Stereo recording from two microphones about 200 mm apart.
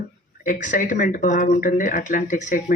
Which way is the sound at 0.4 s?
40° left (ahead or behind).